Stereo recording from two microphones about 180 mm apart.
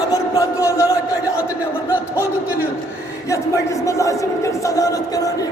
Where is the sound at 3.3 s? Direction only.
15° left (ahead or behind).